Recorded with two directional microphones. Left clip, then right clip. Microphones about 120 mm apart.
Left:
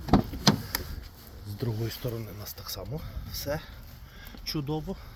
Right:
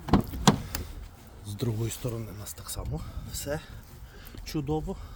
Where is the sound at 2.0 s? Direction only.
25° right (ahead or behind).